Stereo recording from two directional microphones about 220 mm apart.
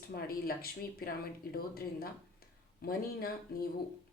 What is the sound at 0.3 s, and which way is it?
Speech, 45° left (ahead or behind).